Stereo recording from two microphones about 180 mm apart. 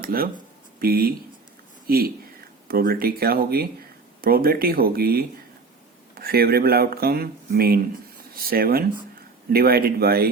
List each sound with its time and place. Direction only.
0.0 s speech: 55° right (ahead or behind)